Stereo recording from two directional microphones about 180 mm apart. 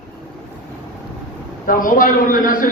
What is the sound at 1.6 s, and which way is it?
A man's voice, 50° left (ahead or behind).